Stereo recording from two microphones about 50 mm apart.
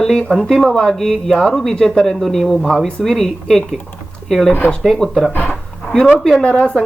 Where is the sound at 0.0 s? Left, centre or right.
Centre.